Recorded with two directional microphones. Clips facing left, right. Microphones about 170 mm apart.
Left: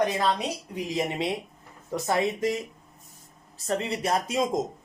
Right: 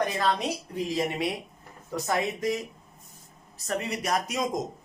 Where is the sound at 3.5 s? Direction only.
30° left (ahead or behind).